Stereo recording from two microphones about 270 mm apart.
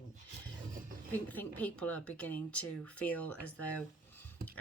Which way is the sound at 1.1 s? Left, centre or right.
Centre.